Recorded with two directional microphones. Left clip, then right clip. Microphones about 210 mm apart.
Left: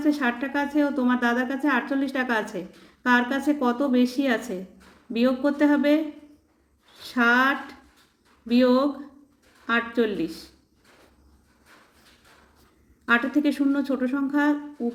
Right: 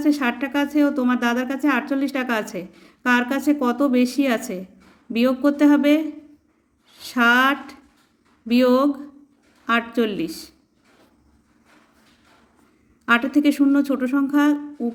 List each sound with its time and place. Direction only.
0.0 s a woman's voice: 35° right (ahead or behind)
7.0 s a woman's voice: 40° right (ahead or behind)
13.1 s a woman's voice: 35° right (ahead or behind)